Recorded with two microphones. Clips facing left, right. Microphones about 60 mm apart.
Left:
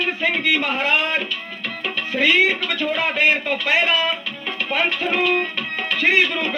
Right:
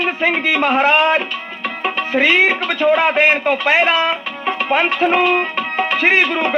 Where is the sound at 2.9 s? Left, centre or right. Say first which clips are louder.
Right 7 dB; right.